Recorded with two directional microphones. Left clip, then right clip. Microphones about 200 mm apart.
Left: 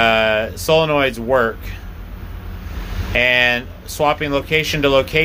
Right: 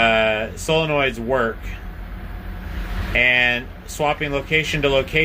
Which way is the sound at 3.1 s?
15° left (ahead or behind).